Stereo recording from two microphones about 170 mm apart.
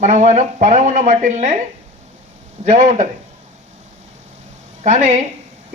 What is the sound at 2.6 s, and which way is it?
Speech, 50° right (ahead or behind).